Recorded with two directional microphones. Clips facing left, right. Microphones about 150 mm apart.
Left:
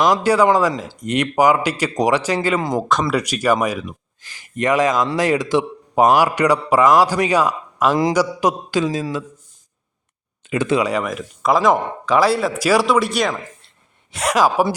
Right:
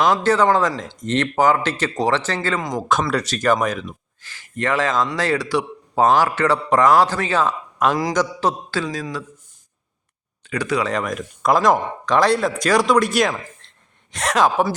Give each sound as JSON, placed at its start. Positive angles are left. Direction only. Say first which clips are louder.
{"t": 0.0, "sound": "a man's voice", "louder": "left 2 dB", "side_deg": 5}
{"t": 2.6, "sound": "speech", "louder": "left 4 dB", "side_deg": 25}
{"t": 2.9, "sound": "speech", "louder": "right 1 dB", "side_deg": 0}
{"t": 3.2, "sound": "a man's voice", "louder": "left 1 dB", "side_deg": 10}
{"t": 10.4, "sound": "speech", "louder": "left 4 dB", "side_deg": 20}
{"t": 10.8, "sound": "a man's voice", "louder": "left 2 dB", "side_deg": 5}